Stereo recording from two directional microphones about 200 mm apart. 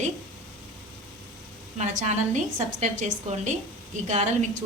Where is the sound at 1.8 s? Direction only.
35° right (ahead or behind).